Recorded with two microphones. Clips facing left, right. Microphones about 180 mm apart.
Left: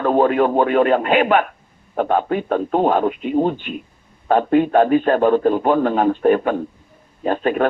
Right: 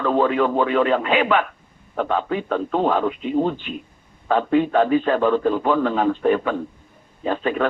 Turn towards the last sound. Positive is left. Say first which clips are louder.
# left 3 dB
turn(degrees=50)  # may be behind; listen again after turning